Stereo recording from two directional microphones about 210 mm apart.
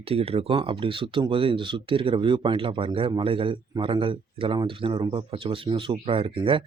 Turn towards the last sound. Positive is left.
turn(degrees=-25)  # may be behind; listen again after turning